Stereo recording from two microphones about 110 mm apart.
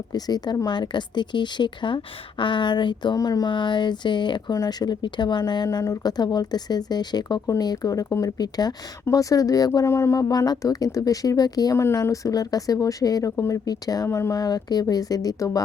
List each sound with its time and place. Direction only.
0.1 s speech: 40° left (ahead or behind)